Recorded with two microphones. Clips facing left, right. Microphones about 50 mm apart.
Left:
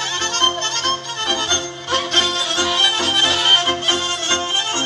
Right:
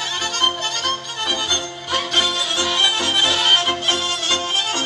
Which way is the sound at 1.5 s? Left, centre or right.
Centre.